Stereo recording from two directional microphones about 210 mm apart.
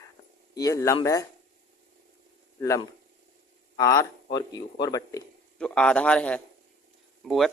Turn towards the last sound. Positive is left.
turn(degrees=0)  # may be behind; listen again after turning